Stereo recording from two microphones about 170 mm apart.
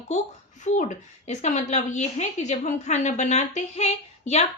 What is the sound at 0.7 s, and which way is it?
A woman's voice, 45° left (ahead or behind).